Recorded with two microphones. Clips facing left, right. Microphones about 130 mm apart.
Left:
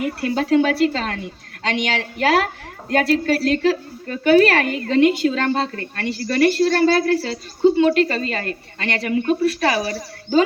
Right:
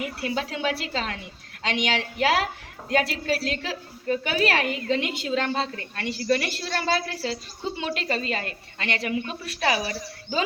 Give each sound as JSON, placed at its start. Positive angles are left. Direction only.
{"t": 0.0, "sound": "speech", "side_deg": 50}